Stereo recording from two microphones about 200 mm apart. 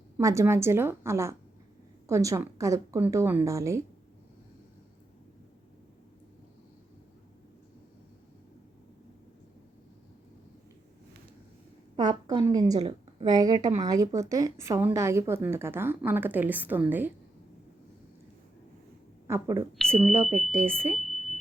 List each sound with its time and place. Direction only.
0.2 s speech: 15° right (ahead or behind)
11.9 s a woman's voice: 20° right (ahead or behind)
19.3 s speech: 15° right (ahead or behind)
21.0 s a sound: centre (ahead or behind)